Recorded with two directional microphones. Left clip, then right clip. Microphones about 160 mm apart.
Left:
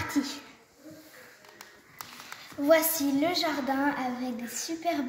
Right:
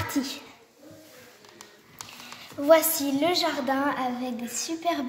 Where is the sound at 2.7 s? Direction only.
15° right (ahead or behind).